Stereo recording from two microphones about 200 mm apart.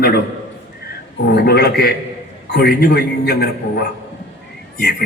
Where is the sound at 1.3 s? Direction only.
55° left (ahead or behind).